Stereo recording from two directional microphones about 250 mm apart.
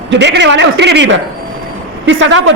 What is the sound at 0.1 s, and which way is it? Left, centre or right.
A woman's voice, right.